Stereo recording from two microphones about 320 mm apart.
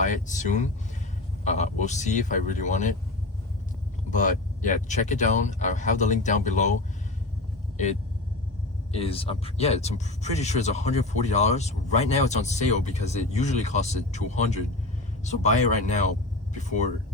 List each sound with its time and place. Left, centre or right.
0.0 s speech: left
4.1 s speech: left
8.9 s speech: centre